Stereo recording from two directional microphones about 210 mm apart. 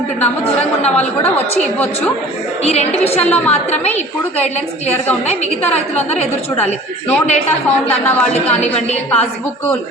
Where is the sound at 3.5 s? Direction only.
30° left (ahead or behind).